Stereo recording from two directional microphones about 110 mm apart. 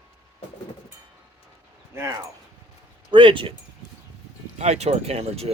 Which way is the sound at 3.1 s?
50° right (ahead or behind).